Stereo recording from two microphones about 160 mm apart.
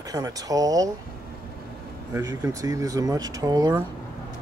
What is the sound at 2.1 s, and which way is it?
Speech, 15° right (ahead or behind).